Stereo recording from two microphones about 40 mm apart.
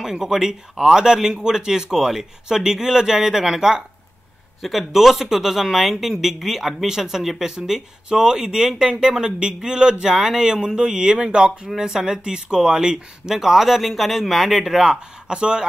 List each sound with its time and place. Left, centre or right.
0.0 s speech: centre
4.6 s speech: centre; by 15.6 s right